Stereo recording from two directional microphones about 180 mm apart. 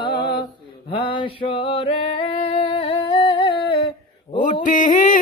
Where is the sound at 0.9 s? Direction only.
30° left (ahead or behind).